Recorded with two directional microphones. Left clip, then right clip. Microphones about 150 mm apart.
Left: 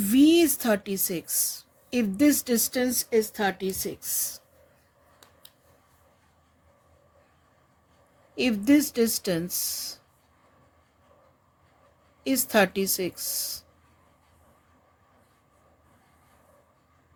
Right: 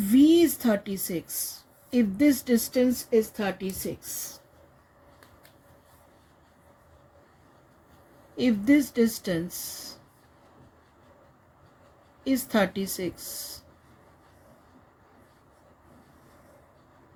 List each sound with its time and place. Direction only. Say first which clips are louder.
0.2 s a woman's voice: even; 65° left (ahead or behind); by 4.1 s 90° left
8.4 s a woman's voice: even; 75° left (ahead or behind)
12.2 s a woman's voice: left 3 dB; 70° left (ahead or behind)